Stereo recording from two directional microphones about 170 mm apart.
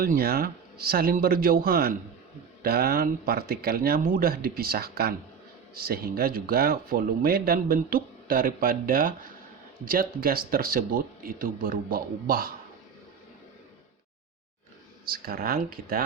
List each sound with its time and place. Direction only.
0.0 s speech: 60° right (ahead or behind)
15.1 s speech: 60° right (ahead or behind)